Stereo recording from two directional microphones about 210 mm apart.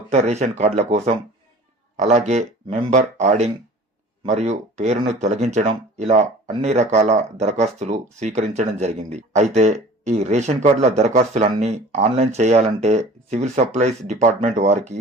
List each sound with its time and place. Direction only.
0.1 s speech: 35° right (ahead or behind)